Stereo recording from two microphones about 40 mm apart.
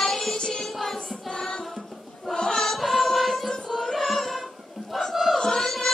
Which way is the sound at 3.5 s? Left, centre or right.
Centre.